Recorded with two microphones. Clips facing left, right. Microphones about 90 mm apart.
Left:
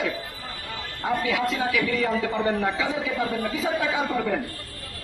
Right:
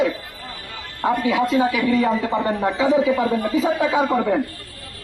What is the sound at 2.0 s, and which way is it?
A man's voice, 40° right (ahead or behind).